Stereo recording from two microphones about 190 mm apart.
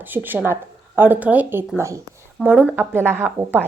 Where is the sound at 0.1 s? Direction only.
10° right (ahead or behind).